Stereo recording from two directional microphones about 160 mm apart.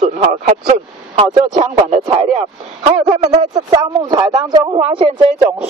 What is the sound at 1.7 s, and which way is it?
Speech, 35° right (ahead or behind).